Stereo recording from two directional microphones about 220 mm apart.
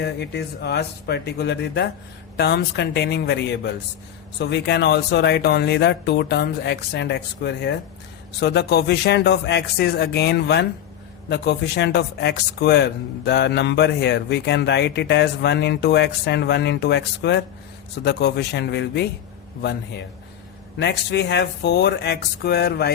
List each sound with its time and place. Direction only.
0.0 s speech: 50° left (ahead or behind)
20.7 s speech: 50° left (ahead or behind)